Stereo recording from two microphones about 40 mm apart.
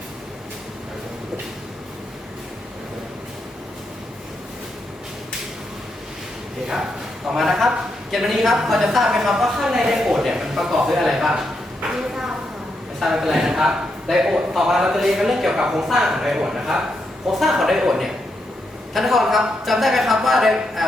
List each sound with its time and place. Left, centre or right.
7.3 s a man's voice: centre
11.9 s a sound: centre
13.0 s a man's voice: centre